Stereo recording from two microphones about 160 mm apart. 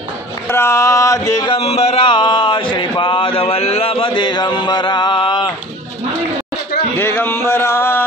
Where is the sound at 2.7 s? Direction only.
30° left (ahead or behind).